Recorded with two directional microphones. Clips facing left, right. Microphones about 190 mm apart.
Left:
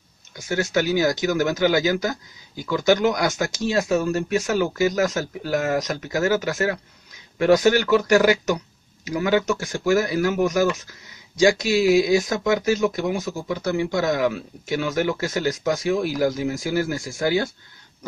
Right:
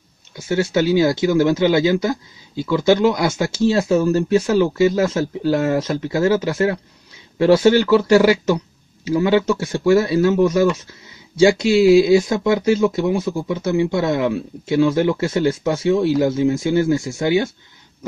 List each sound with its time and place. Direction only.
0.3 s speech: 25° right (ahead or behind)